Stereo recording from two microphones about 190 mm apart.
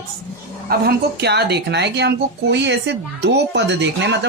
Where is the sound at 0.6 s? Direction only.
55° right (ahead or behind).